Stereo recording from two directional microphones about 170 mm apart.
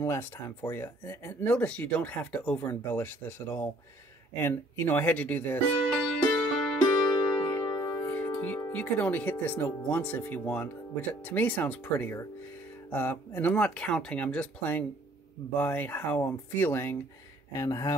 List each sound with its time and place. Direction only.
0.0 s speech: 15° left (ahead or behind)
6.0 s music: centre (ahead or behind)
7.4 s music: 15° left (ahead or behind)
8.4 s speech: 10° left (ahead or behind)